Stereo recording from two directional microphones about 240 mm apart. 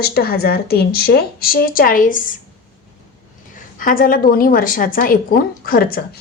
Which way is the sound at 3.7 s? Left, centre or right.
Left.